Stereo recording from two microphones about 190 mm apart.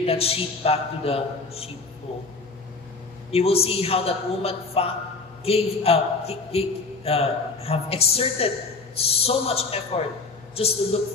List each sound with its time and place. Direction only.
0.0 s a man's voice: 30° left (ahead or behind)
3.3 s a man's voice: 30° left (ahead or behind)